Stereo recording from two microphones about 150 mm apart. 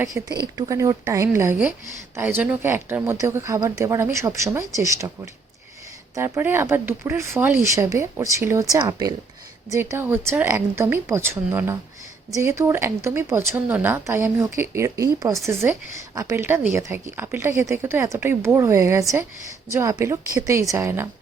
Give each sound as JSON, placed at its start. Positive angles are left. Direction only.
{"t": 0.0, "sound": "speech", "side_deg": -25}